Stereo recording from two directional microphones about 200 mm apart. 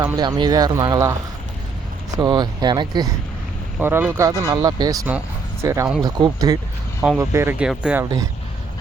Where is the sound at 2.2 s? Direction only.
20° right (ahead or behind).